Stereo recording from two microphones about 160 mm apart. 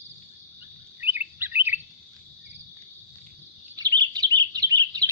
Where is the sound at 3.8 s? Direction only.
25° right (ahead or behind).